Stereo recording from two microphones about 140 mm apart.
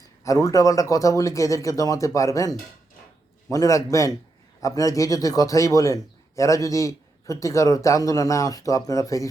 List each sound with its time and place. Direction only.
0.3 s a man's voice: 25° left (ahead or behind)